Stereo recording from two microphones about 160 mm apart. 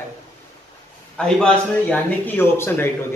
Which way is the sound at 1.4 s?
10° left (ahead or behind).